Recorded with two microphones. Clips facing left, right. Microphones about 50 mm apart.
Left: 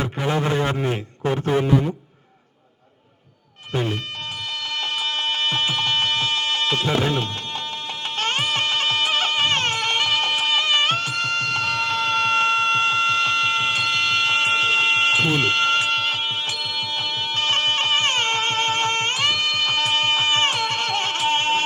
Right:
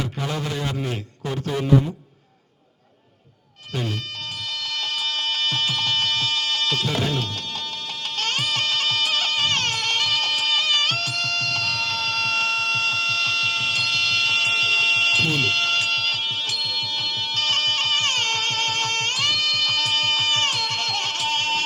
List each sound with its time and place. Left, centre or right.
0.0 s a man's voice: left
3.7 s speech: left
4.8 s music: left